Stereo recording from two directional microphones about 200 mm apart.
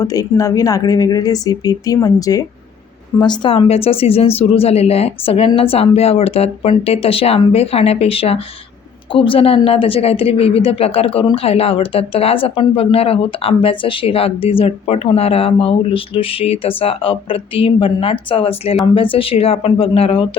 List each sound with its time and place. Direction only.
0.0 s speech: 15° left (ahead or behind)